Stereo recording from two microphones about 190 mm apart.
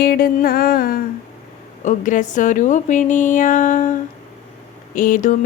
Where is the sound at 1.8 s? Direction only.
40° left (ahead or behind).